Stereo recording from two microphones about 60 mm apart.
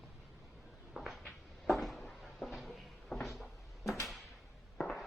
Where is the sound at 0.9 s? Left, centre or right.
Centre.